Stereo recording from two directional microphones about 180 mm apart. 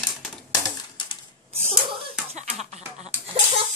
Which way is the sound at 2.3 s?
40° right (ahead or behind).